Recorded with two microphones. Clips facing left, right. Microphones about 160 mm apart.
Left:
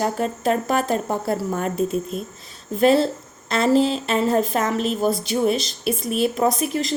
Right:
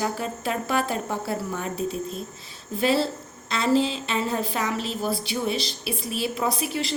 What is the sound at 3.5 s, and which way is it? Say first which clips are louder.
A woman's voice: left 4 dB; 50° left (ahead or behind).